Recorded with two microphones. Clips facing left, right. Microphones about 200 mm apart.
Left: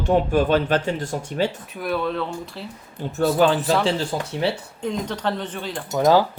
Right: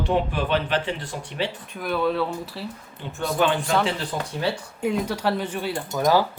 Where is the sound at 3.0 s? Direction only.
45° left (ahead or behind).